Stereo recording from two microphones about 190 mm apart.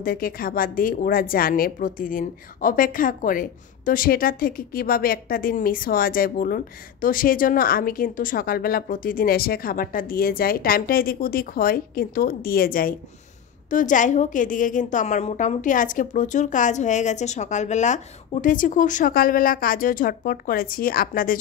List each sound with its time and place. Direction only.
0.0 s a woman's voice: 50° left (ahead or behind)